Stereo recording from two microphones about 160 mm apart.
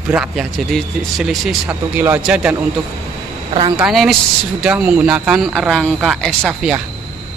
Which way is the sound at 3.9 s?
Centre (ahead or behind).